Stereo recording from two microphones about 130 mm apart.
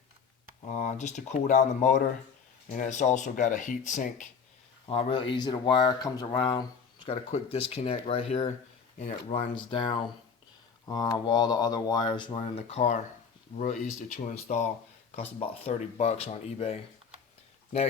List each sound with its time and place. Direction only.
0.6 s speech: 70° left (ahead or behind)
4.9 s speech: 45° left (ahead or behind)
7.3 s speech: 55° left (ahead or behind)
9.0 s speech: 60° left (ahead or behind)
9.6 s speech: 40° left (ahead or behind)
12.4 s speech: 55° left (ahead or behind)
14.1 s speech: 70° left (ahead or behind)
15.1 s speech: 50° left (ahead or behind)